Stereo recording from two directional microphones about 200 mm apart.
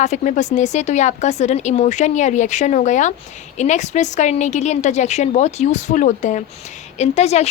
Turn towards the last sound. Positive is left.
turn(degrees=35)  # may be behind; listen again after turning